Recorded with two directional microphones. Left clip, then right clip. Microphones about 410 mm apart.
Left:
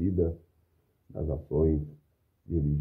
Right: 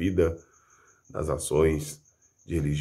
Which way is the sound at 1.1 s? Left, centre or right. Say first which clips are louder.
Right 5 dB; right.